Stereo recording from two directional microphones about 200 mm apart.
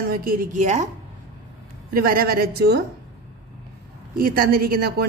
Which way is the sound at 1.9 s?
45° right (ahead or behind).